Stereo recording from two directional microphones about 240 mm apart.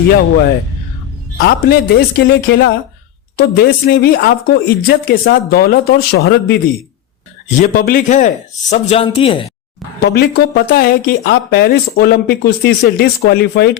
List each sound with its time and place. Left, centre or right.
1.4 s speech: left
7.6 s speech: left
10.0 s speech: left